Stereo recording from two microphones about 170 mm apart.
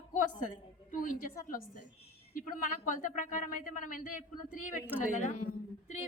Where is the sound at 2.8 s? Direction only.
50° left (ahead or behind).